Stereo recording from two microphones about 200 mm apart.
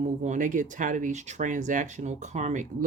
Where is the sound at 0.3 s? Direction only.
40° right (ahead or behind).